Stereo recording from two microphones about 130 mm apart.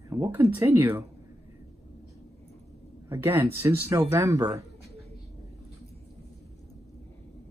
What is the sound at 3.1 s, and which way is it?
Speech, 20° right (ahead or behind).